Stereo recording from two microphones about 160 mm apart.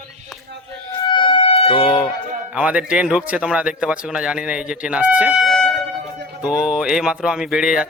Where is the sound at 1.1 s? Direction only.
30° left (ahead or behind).